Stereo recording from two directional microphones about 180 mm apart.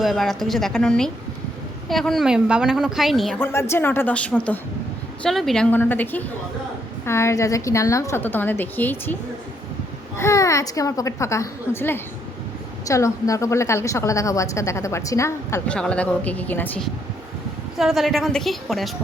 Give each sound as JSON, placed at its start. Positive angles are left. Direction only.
{"t": 0.0, "sound": "a woman's voice", "side_deg": 0}
{"t": 3.3, "sound": "a woman's voice", "side_deg": 15}
{"t": 10.2, "sound": "a woman's voice", "side_deg": 15}
{"t": 17.7, "sound": "a woman's voice", "side_deg": 0}